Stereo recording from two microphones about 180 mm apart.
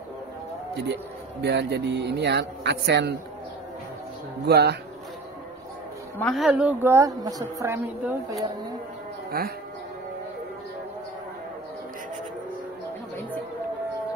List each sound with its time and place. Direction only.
1.4 s a man's voice: 70° right (ahead or behind)
4.5 s a man's voice: 65° right (ahead or behind)
6.1 s a woman's voice: centre (ahead or behind); by 8.5 s 15° right (ahead or behind)
9.3 s a man's voice: 60° right (ahead or behind)